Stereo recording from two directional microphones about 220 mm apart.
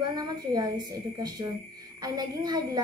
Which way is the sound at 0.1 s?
15° right (ahead or behind).